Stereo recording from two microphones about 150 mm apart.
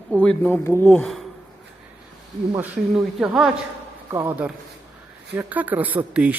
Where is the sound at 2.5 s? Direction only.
10° right (ahead or behind).